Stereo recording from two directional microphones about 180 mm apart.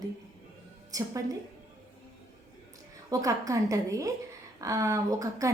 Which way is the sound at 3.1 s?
20° right (ahead or behind).